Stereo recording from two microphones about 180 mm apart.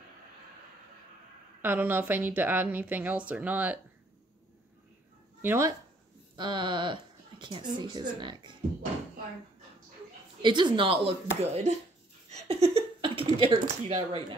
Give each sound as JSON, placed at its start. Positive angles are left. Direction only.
{"t": 1.6, "sound": "speech", "side_deg": -10}
{"t": 5.4, "sound": "speech", "side_deg": -15}
{"t": 6.3, "sound": "speech", "side_deg": -25}
{"t": 10.4, "sound": "a woman's voice", "side_deg": -25}
{"t": 12.3, "sound": "laughter", "side_deg": -35}
{"t": 13.4, "sound": "speech", "side_deg": -35}